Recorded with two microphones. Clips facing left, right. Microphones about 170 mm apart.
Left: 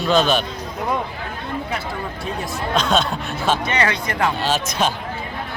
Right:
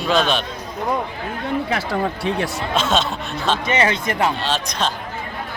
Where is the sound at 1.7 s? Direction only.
80° right.